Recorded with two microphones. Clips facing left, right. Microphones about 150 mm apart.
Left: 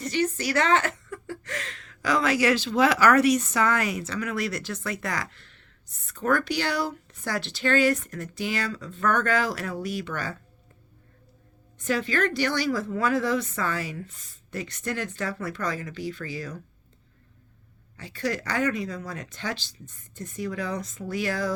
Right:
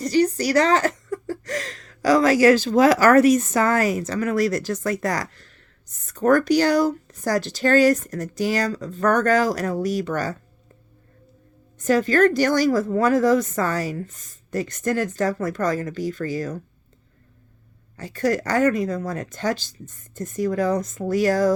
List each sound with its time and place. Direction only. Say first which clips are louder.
0.0 s speech: right 7 dB; 35° right (ahead or behind)
11.8 s speech: right 8 dB; 45° right (ahead or behind)
17.9 s speech: right 7 dB; 45° right (ahead or behind)